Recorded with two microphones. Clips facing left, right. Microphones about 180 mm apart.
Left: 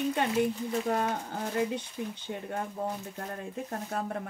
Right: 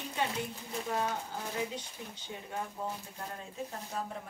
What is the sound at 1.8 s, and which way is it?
Speech, 55° left (ahead or behind).